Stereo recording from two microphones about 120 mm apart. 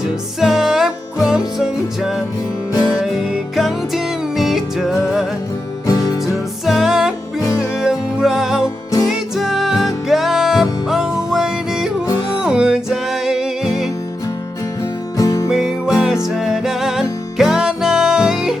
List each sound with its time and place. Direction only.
0.3 s music: 5° right (ahead or behind)
5.8 s music: 30° left (ahead or behind)
6.2 s music: centre (ahead or behind)
15.2 s music: 30° left (ahead or behind)
15.4 s music: 5° right (ahead or behind)